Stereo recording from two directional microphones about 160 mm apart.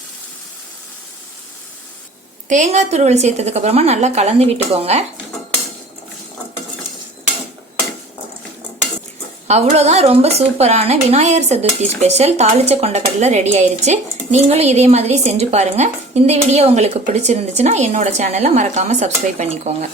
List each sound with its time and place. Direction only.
2.5 s speech: 45° right (ahead or behind)
9.7 s speech: 40° right (ahead or behind)